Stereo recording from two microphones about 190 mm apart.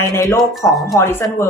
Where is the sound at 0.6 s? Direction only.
Centre (ahead or behind).